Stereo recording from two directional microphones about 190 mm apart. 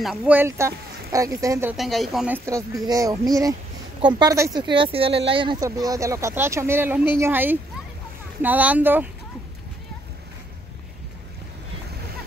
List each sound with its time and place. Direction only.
0.0 s speech: 5° right (ahead or behind)
1.8 s speech: centre (ahead or behind)